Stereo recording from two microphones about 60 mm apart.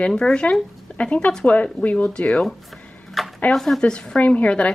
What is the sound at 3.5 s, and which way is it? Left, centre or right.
Speech, centre.